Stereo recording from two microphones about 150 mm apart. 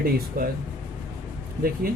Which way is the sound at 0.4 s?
75° right (ahead or behind).